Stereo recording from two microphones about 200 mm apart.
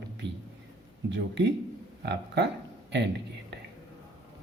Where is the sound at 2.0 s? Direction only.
55° right (ahead or behind).